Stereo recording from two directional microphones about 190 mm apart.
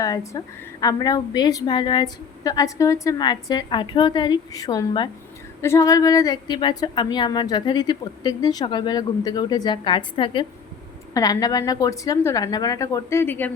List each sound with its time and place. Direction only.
0.0 s a woman's voice: 20° left (ahead or behind)